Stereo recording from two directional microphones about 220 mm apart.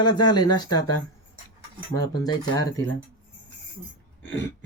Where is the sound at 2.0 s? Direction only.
15° left (ahead or behind).